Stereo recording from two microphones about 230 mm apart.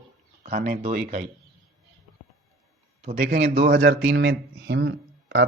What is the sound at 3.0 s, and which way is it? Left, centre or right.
Speech, right.